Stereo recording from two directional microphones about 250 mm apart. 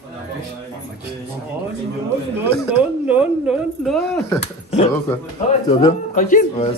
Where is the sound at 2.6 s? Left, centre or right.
Centre.